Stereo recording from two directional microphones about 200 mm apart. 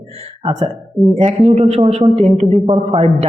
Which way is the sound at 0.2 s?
25° right (ahead or behind).